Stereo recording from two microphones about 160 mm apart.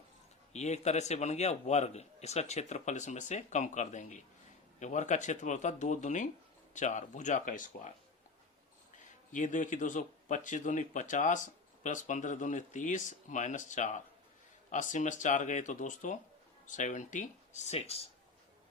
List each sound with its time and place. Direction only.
0.5 s speech: 45° left (ahead or behind)
9.3 s speech: 50° left (ahead or behind)